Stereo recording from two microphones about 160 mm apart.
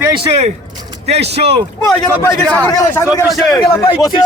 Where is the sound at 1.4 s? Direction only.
40° right (ahead or behind).